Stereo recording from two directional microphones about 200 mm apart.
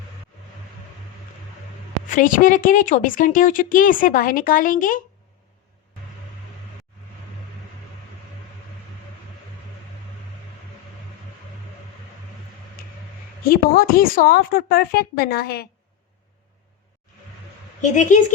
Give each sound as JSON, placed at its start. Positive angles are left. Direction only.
{"t": 2.0, "sound": "a woman's voice", "side_deg": 40}
{"t": 12.8, "sound": "a sound", "side_deg": 45}
{"t": 13.4, "sound": "a woman's voice", "side_deg": 50}
{"t": 17.7, "sound": "a woman's voice", "side_deg": 40}